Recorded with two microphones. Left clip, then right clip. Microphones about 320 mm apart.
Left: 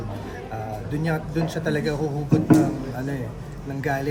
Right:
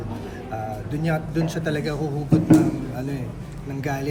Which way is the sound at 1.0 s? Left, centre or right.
Centre.